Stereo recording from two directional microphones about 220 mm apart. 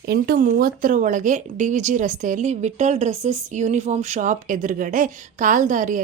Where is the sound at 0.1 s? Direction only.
40° right (ahead or behind).